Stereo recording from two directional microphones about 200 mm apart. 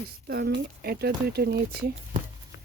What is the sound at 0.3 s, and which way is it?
Speech, 50° right (ahead or behind).